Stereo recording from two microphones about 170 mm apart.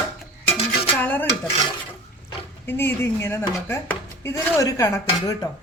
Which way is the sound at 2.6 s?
15° left (ahead or behind).